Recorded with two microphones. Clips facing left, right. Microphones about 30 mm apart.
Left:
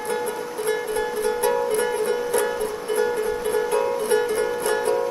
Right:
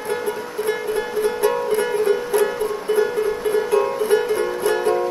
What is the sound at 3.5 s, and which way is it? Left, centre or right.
Music, centre.